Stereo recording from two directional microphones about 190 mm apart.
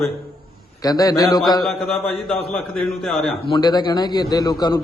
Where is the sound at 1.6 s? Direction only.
Centre (ahead or behind).